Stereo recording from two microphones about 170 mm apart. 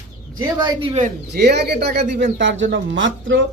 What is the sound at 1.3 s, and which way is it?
Speech, 75° right (ahead or behind).